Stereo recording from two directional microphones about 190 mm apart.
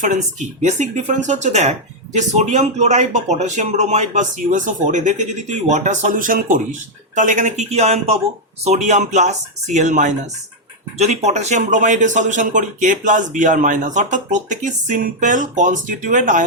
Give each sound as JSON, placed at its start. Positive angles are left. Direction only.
{"t": 0.0, "sound": "speech", "side_deg": -40}